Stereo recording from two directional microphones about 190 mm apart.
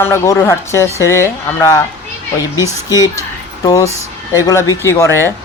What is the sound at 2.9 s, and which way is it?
Speech, 20° left (ahead or behind).